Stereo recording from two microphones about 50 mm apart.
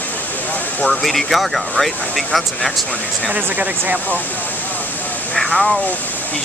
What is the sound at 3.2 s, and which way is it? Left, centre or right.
Speech, right.